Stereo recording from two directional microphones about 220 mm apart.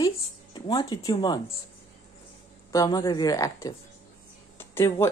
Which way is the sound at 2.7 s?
15° left (ahead or behind).